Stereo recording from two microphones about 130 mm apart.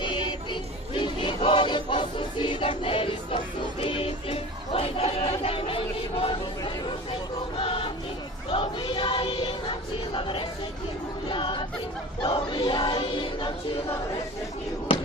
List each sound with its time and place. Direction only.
0.0 s music: 35° left (ahead or behind)
0.9 s choir: 40° left (ahead or behind)
7.5 s music: 45° left (ahead or behind)
8.4 s choir: 40° left (ahead or behind)
11.3 s a sound: 40° left (ahead or behind)
12.2 s choir: 35° left (ahead or behind)